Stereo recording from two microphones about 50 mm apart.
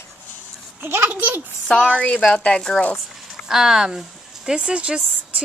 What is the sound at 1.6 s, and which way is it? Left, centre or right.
A woman's voice, centre.